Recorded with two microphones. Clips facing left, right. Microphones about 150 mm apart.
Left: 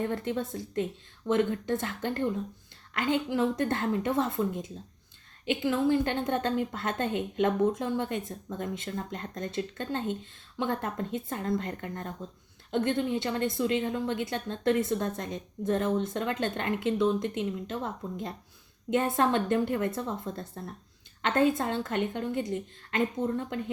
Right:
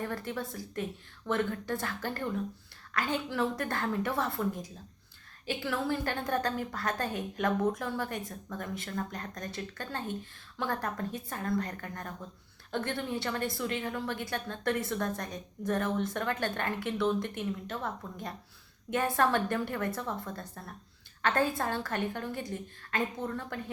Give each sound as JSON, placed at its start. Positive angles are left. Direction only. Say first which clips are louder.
{"t": 0.0, "sound": "a woman's voice", "louder": "left 5 dB", "side_deg": 20}